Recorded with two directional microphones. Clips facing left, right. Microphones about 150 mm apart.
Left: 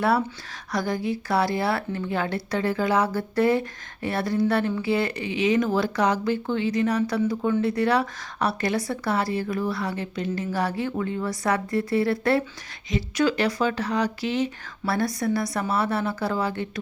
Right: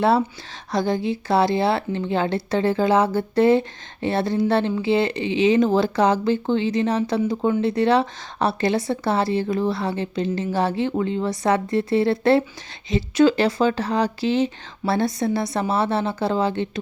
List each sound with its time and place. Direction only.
0.0 s speech: 25° right (ahead or behind)